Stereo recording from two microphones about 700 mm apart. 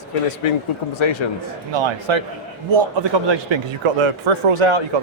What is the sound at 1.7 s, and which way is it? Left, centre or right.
A man's voice, right.